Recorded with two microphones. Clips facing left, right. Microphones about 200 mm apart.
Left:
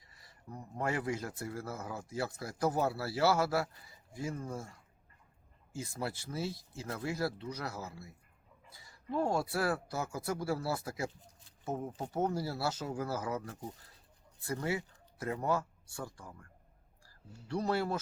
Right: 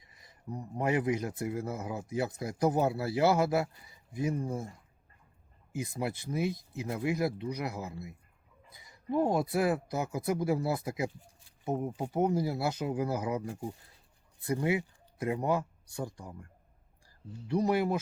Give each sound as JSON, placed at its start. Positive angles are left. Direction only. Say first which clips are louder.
{"t": 0.0, "sound": "speech", "louder": "right 7 dB", "side_deg": -20}
{"t": 5.7, "sound": "speech", "louder": "right 4 dB", "side_deg": -15}